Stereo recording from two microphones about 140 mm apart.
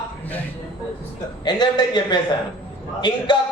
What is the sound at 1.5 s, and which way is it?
Speech, 30° left (ahead or behind).